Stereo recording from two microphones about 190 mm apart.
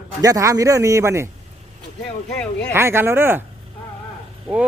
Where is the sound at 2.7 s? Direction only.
15° right (ahead or behind).